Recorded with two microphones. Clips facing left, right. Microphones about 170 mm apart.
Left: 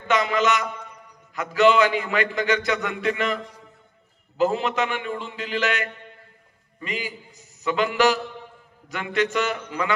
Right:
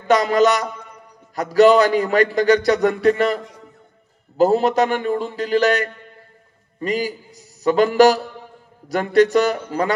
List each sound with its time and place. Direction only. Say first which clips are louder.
0.1 s a man's voice: right 6 dB; 40° right (ahead or behind)